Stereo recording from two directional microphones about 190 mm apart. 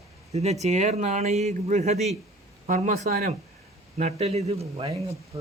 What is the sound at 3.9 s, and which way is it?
Speech, 35° right (ahead or behind).